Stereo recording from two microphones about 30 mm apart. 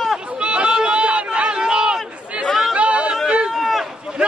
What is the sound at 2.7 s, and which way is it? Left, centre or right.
Chatter, right.